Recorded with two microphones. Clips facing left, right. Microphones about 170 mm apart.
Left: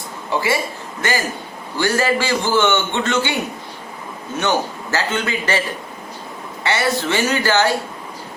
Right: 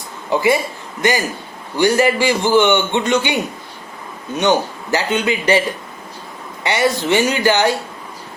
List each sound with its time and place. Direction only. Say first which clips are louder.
0.3 s a man's voice: right 4 dB; 20° right (ahead or behind)
4.4 s a man's voice: right 4 dB; 15° right (ahead or behind)